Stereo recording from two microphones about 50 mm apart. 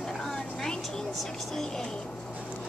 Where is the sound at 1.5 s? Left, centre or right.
Centre.